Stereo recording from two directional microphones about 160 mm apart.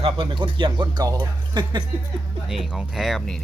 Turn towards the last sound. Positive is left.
turn(degrees=0)  # may be behind; listen again after turning